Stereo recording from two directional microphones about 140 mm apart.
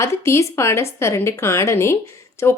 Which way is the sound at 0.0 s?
20° left (ahead or behind).